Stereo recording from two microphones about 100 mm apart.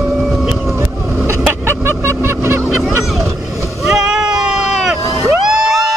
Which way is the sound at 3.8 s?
5° right (ahead or behind).